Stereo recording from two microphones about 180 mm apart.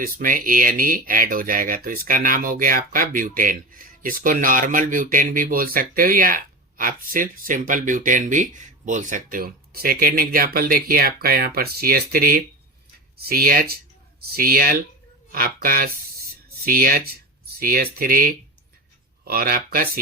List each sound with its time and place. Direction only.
0.0 s speech: 50° right (ahead or behind)